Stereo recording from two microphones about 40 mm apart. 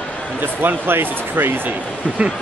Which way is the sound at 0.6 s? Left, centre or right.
Right.